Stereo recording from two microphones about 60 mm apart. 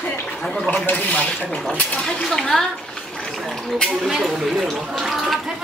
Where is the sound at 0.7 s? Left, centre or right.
Left.